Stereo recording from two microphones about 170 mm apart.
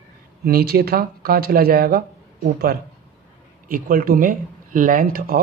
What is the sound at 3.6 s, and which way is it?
Speech, 55° right (ahead or behind).